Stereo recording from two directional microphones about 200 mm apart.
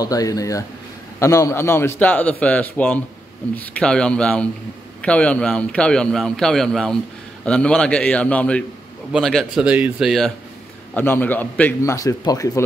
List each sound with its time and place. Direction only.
0.0 s a man's voice: 15° left (ahead or behind)